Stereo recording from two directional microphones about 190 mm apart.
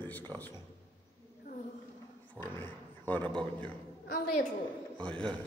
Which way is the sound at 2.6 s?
10° left (ahead or behind).